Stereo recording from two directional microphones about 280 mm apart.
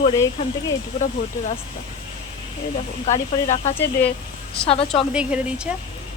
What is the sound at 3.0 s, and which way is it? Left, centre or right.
Speech, left.